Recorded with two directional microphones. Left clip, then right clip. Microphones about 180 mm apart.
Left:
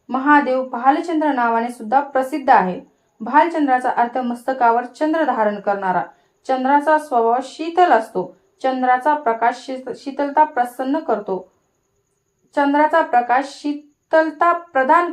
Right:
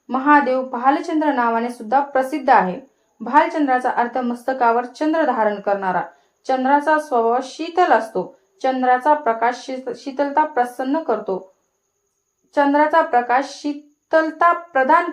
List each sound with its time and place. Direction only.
0.1 s a woman's voice: 30° left (ahead or behind)
12.5 s speech: 30° left (ahead or behind)